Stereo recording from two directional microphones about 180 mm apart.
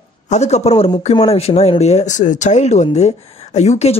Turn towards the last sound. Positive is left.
turn(degrees=35)  # may be behind; listen again after turning